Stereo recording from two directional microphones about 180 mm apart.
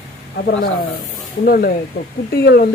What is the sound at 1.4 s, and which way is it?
Speech, 55° left (ahead or behind).